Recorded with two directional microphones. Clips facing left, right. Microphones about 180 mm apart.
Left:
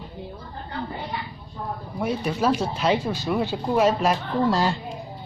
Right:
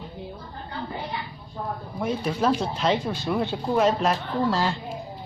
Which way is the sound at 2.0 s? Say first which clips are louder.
Left 1 dB; 10° left (ahead or behind).